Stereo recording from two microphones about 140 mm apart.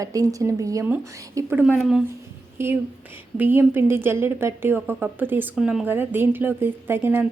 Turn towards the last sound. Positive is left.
turn(degrees=-15)  # may be behind; listen again after turning